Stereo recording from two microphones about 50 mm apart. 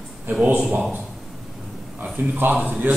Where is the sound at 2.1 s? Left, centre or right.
Right.